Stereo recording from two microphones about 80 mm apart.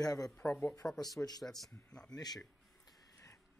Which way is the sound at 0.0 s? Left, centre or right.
Left.